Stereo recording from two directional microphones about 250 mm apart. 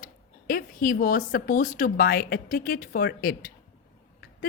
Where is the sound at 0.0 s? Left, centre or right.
Left.